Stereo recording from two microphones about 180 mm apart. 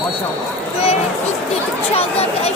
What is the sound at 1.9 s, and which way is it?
Chatter, 35° left (ahead or behind).